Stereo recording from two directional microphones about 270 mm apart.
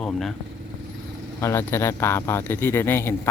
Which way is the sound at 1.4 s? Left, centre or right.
Centre.